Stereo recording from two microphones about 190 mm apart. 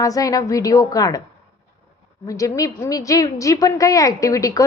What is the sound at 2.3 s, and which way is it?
A woman's voice, 15° left (ahead or behind).